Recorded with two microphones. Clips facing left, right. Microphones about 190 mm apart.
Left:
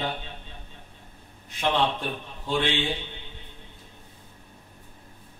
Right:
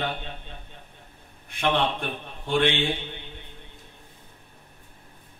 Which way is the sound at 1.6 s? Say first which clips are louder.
Even; 60° right (ahead or behind).